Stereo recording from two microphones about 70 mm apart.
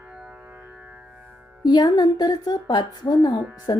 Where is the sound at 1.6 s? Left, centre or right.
Left.